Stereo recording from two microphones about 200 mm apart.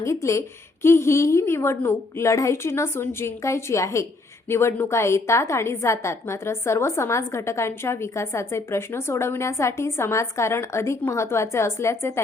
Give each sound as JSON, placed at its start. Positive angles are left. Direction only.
{"t": 0.0, "sound": "a woman's voice", "side_deg": 15}